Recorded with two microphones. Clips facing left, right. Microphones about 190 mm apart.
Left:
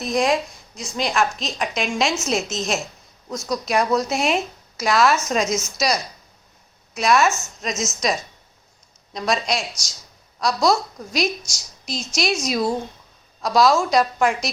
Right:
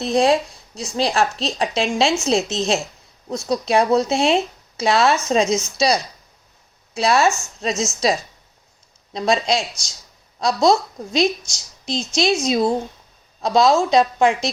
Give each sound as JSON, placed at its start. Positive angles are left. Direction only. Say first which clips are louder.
{"t": 0.0, "sound": "speech", "louder": "right 4 dB", "side_deg": -30}
{"t": 9.1, "sound": "speech", "louder": "right 4 dB", "side_deg": -25}